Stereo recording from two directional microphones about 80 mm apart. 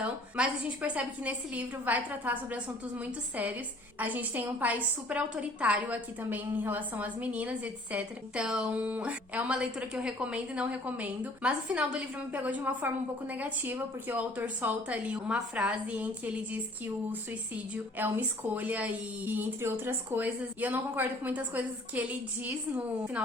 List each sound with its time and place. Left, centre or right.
0.0 s speech: centre